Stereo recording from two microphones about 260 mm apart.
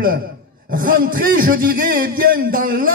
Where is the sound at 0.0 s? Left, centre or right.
Right.